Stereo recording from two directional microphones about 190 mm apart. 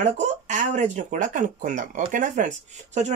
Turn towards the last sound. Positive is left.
turn(degrees=-40)  # may be behind; listen again after turning